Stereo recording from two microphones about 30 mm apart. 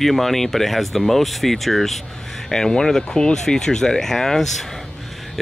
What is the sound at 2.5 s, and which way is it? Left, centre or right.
Speech, left.